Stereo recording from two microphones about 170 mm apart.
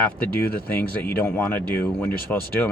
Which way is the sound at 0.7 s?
10° left (ahead or behind).